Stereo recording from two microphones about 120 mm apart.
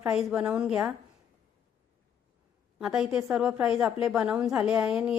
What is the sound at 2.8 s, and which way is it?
A woman's voice, 5° right (ahead or behind).